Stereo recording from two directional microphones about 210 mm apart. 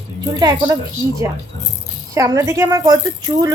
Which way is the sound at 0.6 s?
15° right (ahead or behind).